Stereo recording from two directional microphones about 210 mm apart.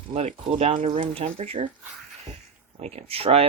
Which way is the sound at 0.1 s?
25° right (ahead or behind).